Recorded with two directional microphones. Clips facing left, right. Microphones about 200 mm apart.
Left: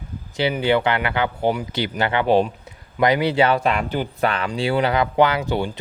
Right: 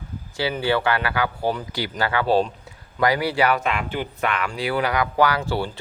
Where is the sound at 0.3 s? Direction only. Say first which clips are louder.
Left 3 dB; 20° left (ahead or behind).